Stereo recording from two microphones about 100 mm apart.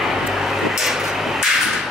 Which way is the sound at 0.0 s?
Centre (ahead or behind).